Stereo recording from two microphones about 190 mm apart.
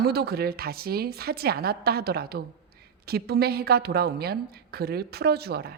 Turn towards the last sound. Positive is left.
turn(degrees=-55)  # may be behind; listen again after turning